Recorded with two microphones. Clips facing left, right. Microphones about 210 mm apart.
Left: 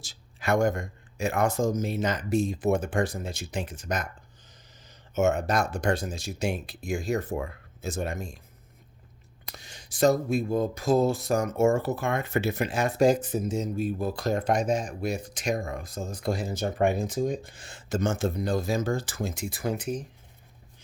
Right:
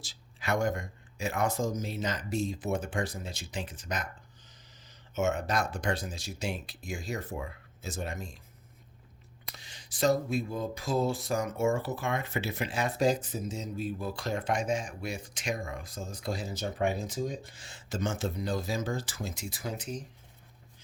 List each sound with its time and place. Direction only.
0.0 s speech: 45° left (ahead or behind)
5.1 s speech: 45° left (ahead or behind)
9.6 s speech: 45° left (ahead or behind)